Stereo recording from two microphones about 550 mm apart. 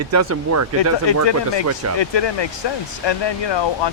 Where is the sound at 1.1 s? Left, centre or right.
Left.